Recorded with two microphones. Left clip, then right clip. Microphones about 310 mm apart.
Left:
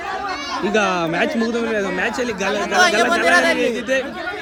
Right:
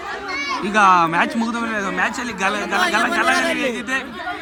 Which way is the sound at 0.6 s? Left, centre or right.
Centre.